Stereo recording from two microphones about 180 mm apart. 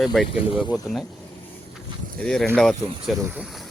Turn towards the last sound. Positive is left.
turn(degrees=0)  # may be behind; listen again after turning